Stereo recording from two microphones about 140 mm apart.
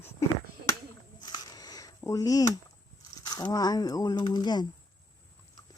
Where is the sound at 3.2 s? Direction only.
25° left (ahead or behind).